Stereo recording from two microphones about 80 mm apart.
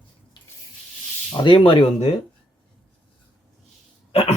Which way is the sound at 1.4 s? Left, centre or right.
Left.